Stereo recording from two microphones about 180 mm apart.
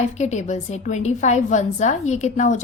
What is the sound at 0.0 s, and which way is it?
A woman's voice, 40° left (ahead or behind).